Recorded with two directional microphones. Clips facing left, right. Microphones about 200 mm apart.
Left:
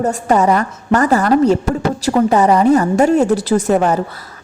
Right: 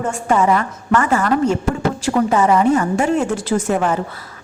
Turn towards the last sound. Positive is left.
turn(degrees=40)  # may be behind; listen again after turning